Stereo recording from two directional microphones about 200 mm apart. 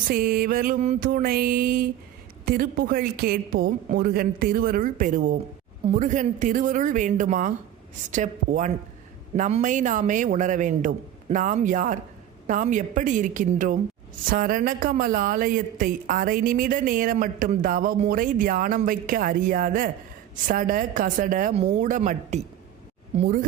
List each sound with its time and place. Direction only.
0.1 s a woman's voice: 45° right (ahead or behind)